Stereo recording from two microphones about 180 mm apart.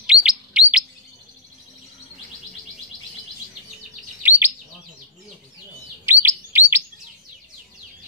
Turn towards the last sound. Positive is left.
turn(degrees=-10)  # may be behind; listen again after turning